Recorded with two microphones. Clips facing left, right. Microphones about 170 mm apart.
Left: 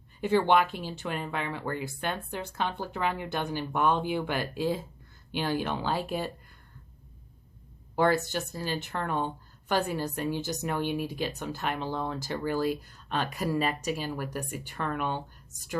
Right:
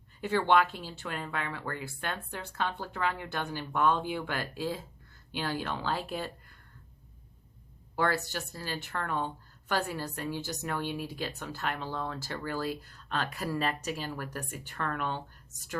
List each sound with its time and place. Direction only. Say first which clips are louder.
0.2 s speech: left 2 dB; 15° left (ahead or behind)
7.9 s speech: left 5 dB; 20° left (ahead or behind)